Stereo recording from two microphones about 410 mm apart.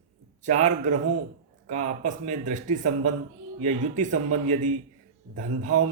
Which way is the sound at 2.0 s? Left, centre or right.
Centre.